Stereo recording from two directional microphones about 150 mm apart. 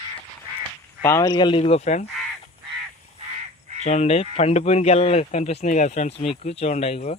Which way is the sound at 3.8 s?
50° left (ahead or behind).